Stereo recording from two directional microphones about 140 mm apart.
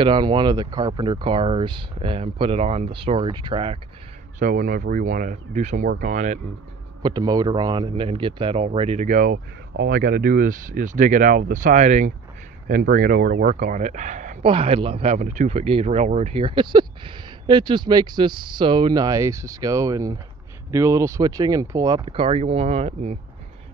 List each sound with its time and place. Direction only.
0.0 s speech: 35° right (ahead or behind)
4.4 s speech: 75° right (ahead or behind); by 5.9 s 60° right (ahead or behind)
5.9 s speech: 75° right (ahead or behind); by 6.4 s 60° right (ahead or behind)
7.0 s speech: 30° right (ahead or behind); by 9.4 s 65° right (ahead or behind)
9.8 s speech: 90° right; by 12.1 s 60° right (ahead or behind)
12.6 s speech: 80° right; by 14.4 s 60° right (ahead or behind)
14.4 s speech: 40° right (ahead or behind)